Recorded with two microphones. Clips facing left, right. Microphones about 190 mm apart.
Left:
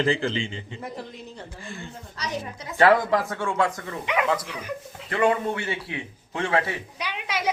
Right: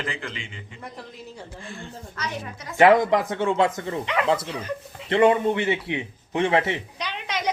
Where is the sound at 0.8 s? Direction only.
Centre (ahead or behind).